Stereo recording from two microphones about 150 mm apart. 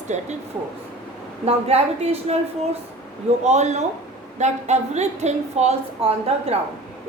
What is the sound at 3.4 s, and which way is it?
A woman's voice, 50° right (ahead or behind).